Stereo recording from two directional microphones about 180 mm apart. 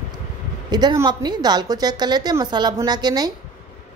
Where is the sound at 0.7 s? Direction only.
25° right (ahead or behind).